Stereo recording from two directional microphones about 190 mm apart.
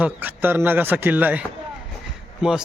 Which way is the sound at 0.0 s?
10° right (ahead or behind).